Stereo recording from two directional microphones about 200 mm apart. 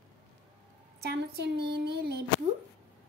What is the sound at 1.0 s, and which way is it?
Speech, 60° right (ahead or behind).